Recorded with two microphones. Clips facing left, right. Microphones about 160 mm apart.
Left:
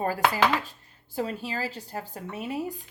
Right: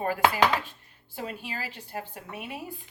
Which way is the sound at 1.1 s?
35° left (ahead or behind).